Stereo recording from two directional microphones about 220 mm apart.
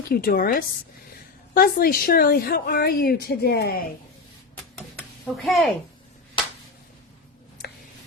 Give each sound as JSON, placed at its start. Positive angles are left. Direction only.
{"t": 0.1, "sound": "a woman's voice", "side_deg": 40}
{"t": 5.4, "sound": "a woman's voice", "side_deg": 0}